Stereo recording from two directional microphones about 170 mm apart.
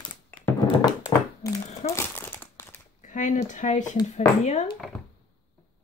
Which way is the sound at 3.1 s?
50° left (ahead or behind).